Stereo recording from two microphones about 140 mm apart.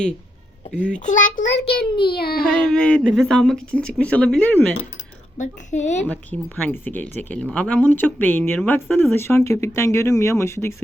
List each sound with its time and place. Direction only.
0.9 s a child's voice: 65° left (ahead or behind)
2.0 s a sound: 90° left
2.5 s speech: 5° left (ahead or behind)
5.4 s a child's voice: 55° left (ahead or behind)
6.7 s speech: 15° left (ahead or behind)